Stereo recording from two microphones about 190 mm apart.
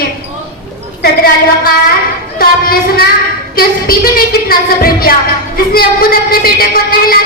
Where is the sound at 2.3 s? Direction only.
50° left (ahead or behind).